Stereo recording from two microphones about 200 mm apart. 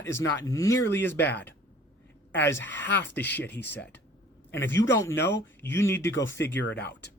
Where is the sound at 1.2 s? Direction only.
60° left (ahead or behind).